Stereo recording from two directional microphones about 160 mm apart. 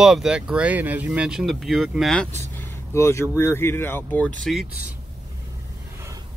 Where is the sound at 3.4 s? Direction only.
15° left (ahead or behind).